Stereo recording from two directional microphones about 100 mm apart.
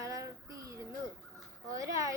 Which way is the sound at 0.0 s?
35° right (ahead or behind).